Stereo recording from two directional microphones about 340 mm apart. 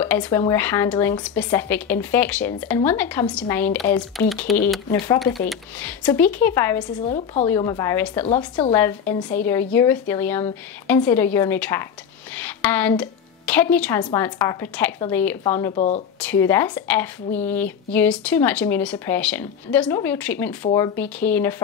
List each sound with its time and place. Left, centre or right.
0.0 s a woman's voice: centre
15.7 s speech: centre
16.2 s speech: centre